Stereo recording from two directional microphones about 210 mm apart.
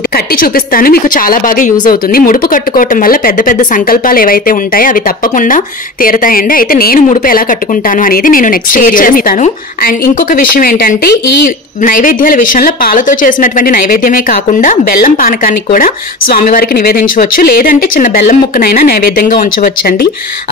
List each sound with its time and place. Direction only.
0.1 s a woman's voice: 45° left (ahead or behind)